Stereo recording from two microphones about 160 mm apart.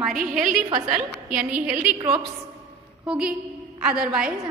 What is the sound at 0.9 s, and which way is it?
Speech, 5° right (ahead or behind).